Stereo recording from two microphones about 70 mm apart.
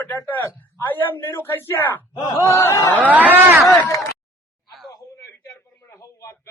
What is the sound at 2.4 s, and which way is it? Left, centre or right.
Speech, left.